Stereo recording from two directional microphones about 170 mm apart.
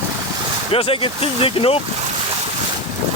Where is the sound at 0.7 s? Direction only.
35° left (ahead or behind).